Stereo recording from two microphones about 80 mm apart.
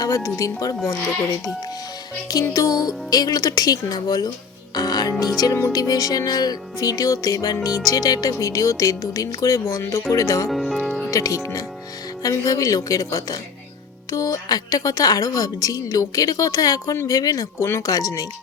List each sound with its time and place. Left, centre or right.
0.0 s a woman's voice: left
2.5 s a woman's voice: left
4.7 s music: left
5.4 s speech: left
5.7 s a woman's voice: left
10.5 s music: centre
11.1 s a woman's voice: left